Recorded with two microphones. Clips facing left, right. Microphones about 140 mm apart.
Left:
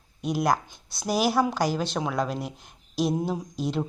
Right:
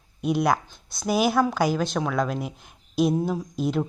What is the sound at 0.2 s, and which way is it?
Speech, centre (ahead or behind).